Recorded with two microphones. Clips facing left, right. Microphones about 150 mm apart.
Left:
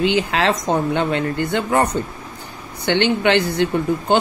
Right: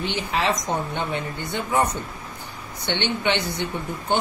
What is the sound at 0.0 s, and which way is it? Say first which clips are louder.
Speech: left 7 dB; 90° left.